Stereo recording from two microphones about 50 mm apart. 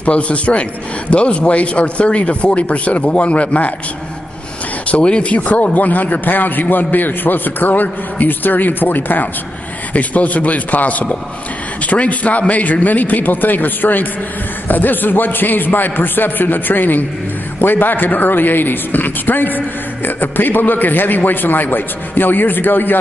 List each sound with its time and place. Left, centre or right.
0.0 s speech: left
4.8 s speech: left